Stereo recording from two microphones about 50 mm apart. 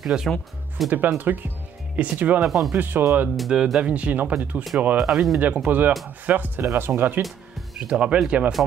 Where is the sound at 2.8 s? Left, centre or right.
Right.